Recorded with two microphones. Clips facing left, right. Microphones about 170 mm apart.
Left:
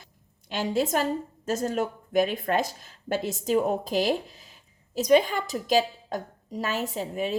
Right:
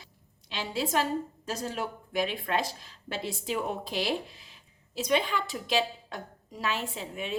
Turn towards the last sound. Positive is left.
turn(degrees=40)  # may be behind; listen again after turning